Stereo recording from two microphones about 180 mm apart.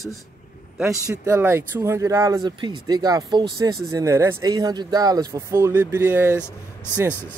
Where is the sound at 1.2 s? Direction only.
15° right (ahead or behind).